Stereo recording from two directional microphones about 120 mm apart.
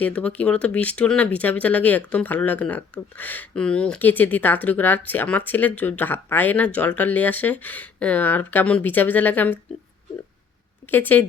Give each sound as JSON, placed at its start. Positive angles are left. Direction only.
{"t": 0.0, "sound": "speech", "side_deg": 10}
{"t": 10.9, "sound": "speech", "side_deg": 15}